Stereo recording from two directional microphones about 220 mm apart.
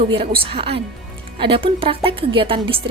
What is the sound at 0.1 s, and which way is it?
A woman's voice, 25° right (ahead or behind).